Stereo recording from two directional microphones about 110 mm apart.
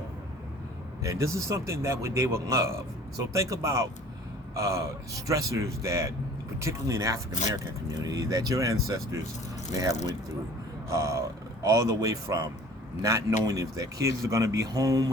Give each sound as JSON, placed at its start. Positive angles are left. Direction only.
{"t": 1.0, "sound": "a man's voice", "side_deg": -30}
{"t": 7.3, "sound": "speech", "side_deg": 90}
{"t": 7.6, "sound": "speech", "side_deg": -30}
{"t": 10.8, "sound": "a man's voice", "side_deg": -25}